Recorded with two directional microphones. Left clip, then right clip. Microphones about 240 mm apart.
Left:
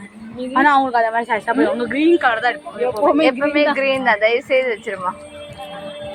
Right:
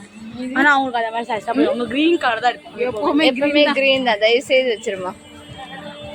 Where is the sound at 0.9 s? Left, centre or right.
Centre.